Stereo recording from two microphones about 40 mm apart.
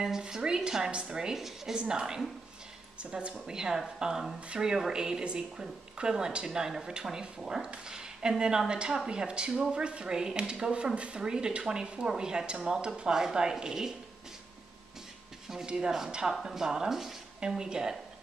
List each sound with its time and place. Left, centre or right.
0.0 s speech: centre
3.0 s speech: right
3.5 s speech: centre
15.6 s speech: right
17.4 s speech: centre